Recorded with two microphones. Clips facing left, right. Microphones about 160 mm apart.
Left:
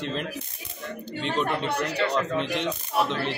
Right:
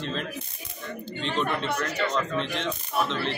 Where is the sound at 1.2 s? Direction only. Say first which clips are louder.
Left 1 dB; 15° left (ahead or behind).